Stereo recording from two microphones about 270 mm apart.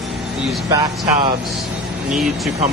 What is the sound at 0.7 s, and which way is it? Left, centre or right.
Speech, centre.